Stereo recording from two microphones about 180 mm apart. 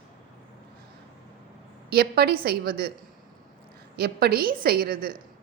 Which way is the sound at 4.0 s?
60° right (ahead or behind).